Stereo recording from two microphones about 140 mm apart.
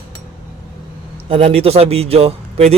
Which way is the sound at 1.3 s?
45° right (ahead or behind).